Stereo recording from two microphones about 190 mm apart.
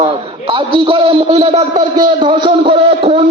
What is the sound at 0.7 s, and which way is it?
A man's voice, 25° right (ahead or behind).